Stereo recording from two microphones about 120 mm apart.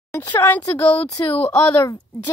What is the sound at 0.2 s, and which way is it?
Speech, 30° left (ahead or behind).